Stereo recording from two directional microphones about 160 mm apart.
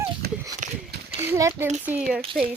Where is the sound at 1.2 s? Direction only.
15° right (ahead or behind).